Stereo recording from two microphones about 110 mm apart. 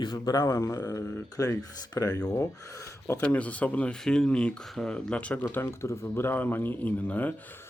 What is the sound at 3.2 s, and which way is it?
Speech, 10° left (ahead or behind).